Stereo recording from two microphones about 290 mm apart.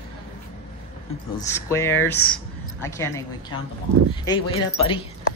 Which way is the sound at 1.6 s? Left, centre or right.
Centre.